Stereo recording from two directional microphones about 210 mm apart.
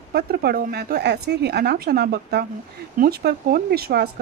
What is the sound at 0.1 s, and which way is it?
Speech, 45° right (ahead or behind).